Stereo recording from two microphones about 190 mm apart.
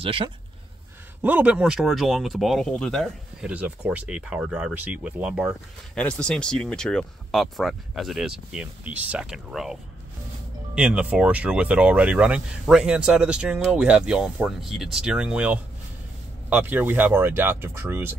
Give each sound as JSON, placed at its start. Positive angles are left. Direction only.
{"t": 0.0, "sound": "speech", "side_deg": -30}
{"t": 1.2, "sound": "speech", "side_deg": -10}
{"t": 5.9, "sound": "speech", "side_deg": 5}